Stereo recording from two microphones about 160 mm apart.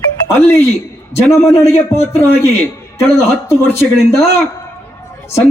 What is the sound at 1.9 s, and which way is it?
A man's voice, 15° left (ahead or behind).